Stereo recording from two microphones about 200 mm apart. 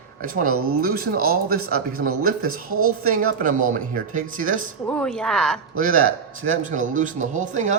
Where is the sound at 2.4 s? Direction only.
90° right.